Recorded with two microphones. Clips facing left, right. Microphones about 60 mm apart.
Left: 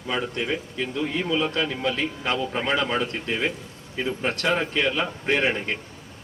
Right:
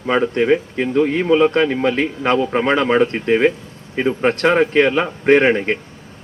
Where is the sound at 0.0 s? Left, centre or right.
Right.